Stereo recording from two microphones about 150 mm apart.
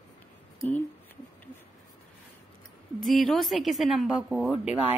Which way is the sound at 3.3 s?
Centre (ahead or behind).